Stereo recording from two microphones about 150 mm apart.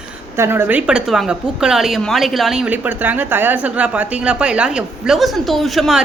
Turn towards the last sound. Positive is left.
turn(degrees=0)  # may be behind; listen again after turning